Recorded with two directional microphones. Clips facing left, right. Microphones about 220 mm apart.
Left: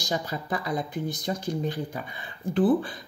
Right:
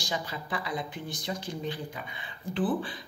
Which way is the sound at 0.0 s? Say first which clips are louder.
Left 5 dB; 40° left (ahead or behind).